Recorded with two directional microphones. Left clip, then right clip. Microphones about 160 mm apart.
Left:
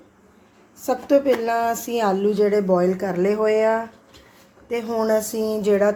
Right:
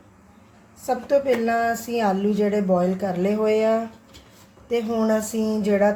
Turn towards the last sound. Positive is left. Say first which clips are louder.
# left 2 dB
turn(degrees=40)  # may be behind; listen again after turning